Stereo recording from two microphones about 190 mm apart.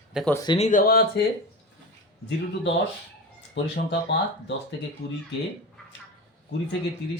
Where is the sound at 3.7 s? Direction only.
65° left (ahead or behind).